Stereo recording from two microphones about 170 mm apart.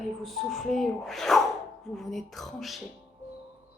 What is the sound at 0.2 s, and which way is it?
Speech, centre (ahead or behind).